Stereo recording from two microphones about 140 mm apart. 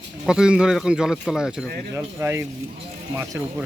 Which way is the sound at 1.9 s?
20° right (ahead or behind).